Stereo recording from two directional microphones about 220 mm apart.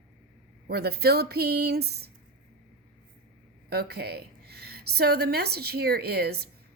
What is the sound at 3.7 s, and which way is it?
A woman's voice, 45° right (ahead or behind).